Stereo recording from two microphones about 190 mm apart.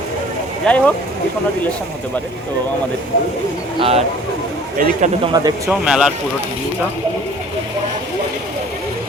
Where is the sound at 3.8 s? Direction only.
30° right (ahead or behind).